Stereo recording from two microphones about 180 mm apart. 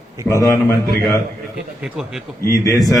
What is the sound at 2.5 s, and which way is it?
Speech, 20° left (ahead or behind).